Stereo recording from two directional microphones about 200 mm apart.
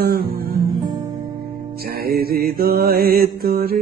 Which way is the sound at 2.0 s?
50° right (ahead or behind).